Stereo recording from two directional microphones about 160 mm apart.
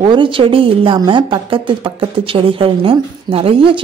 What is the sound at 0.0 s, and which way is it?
Speech, 30° right (ahead or behind).